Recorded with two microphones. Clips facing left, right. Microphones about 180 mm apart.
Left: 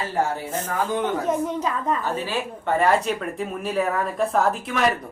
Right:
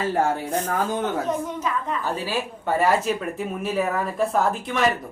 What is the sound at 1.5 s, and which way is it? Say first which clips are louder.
Speech: left 2 dB; 40° left (ahead or behind).